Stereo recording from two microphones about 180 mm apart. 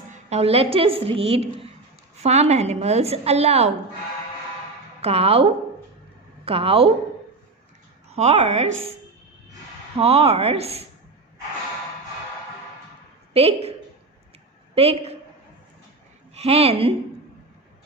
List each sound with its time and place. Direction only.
0.1 s a woman's voice: 35° right (ahead or behind)
5.0 s a woman's voice: 35° right (ahead or behind)
8.1 s a woman's voice: 35° right (ahead or behind)
10.0 s a woman's voice: 35° right (ahead or behind)
13.3 s a woman's voice: 35° right (ahead or behind)
14.8 s a woman's voice: 35° right (ahead or behind)
16.3 s a woman's voice: 35° right (ahead or behind)